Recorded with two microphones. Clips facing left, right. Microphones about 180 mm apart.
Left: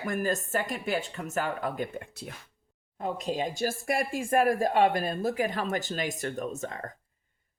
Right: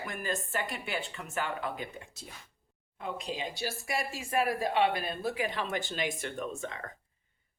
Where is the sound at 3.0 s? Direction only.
45° left (ahead or behind).